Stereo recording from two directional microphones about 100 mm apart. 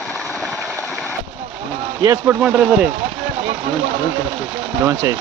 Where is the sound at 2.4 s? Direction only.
10° right (ahead or behind).